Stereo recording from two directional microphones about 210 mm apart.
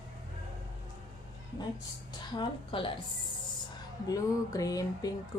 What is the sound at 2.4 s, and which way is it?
A woman's voice, 25° left (ahead or behind).